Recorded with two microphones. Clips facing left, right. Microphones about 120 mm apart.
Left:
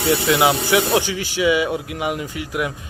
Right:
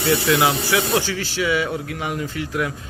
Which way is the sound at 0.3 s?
20° left (ahead or behind).